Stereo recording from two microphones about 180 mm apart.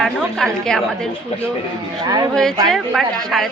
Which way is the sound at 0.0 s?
Centre (ahead or behind).